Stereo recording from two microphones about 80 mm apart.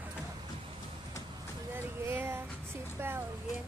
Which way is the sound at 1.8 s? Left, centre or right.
Right.